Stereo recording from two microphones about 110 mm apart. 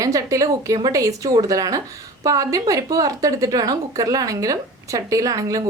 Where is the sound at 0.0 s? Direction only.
30° right (ahead or behind).